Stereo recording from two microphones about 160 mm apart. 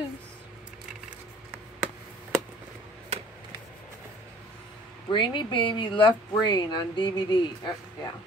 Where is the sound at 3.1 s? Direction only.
40° right (ahead or behind).